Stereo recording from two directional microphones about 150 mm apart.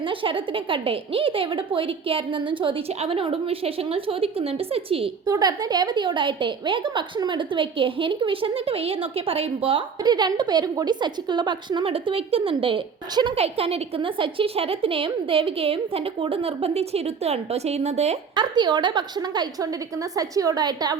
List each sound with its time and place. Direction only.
0.0 s a woman's voice: 35° right (ahead or behind)
5.2 s a woman's voice: 25° right (ahead or behind)
10.0 s a woman's voice: 25° right (ahead or behind); by 18.2 s 45° right (ahead or behind)
18.3 s a woman's voice: 30° right (ahead or behind)